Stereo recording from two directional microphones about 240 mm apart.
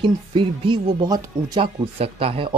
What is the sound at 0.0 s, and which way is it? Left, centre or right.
Speech, right.